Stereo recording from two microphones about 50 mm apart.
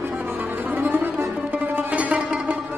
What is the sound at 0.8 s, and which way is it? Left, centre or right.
Music, right.